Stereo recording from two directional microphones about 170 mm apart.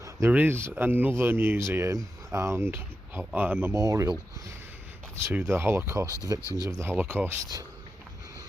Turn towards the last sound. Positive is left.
turn(degrees=-15)  # may be behind; listen again after turning